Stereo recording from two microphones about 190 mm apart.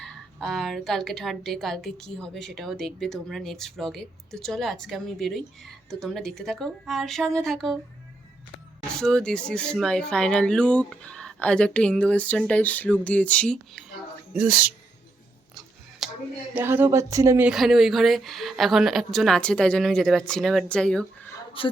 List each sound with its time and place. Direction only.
0.0 s a woman's voice: centre (ahead or behind)
8.9 s a woman's voice: 5° left (ahead or behind)
14.3 s speech: 5° right (ahead or behind)
16.0 s a sound: centre (ahead or behind)
16.6 s speech: 10° right (ahead or behind)
17.5 s a woman's voice: centre (ahead or behind)
21.3 s a sound: 30° left (ahead or behind)